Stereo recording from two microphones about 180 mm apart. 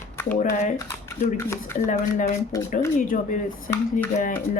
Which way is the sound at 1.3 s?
15° left (ahead or behind).